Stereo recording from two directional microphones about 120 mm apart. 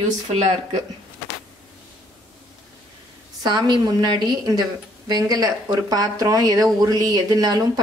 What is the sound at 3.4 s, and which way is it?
A woman's voice, 35° right (ahead or behind).